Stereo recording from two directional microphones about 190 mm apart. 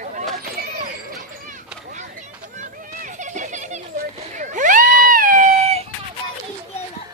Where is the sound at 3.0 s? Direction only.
40° right (ahead or behind).